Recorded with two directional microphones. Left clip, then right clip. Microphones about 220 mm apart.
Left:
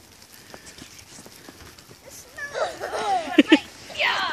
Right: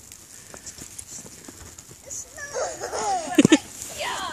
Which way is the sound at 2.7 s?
Centre (ahead or behind).